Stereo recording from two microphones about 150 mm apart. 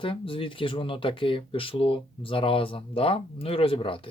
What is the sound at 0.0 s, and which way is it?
Speech, 35° left (ahead or behind).